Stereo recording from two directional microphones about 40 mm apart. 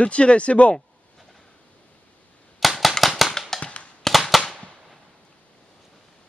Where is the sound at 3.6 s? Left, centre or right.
Left.